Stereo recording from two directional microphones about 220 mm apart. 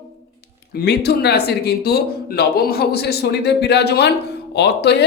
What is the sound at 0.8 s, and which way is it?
Speech, 50° left (ahead or behind).